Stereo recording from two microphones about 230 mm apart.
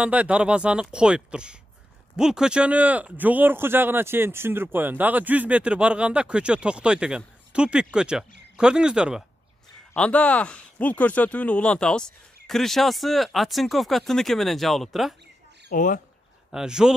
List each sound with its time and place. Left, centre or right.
0.0 s speech: centre
15.7 s speech: left
16.5 s speech: centre